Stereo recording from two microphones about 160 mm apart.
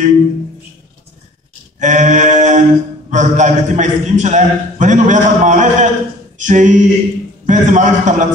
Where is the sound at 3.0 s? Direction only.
50° right (ahead or behind).